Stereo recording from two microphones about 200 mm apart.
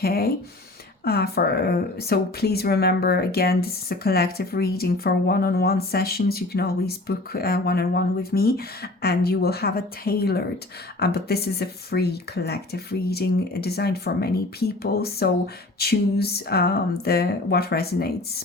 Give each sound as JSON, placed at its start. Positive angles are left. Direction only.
{"t": 0.0, "sound": "a woman's voice", "side_deg": 50}